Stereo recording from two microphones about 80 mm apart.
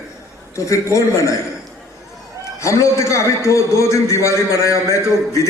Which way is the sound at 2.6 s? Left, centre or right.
Left.